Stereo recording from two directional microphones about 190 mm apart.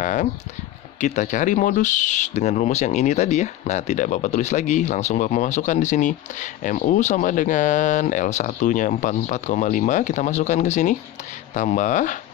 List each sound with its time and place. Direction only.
0.0 s speech: 40° left (ahead or behind)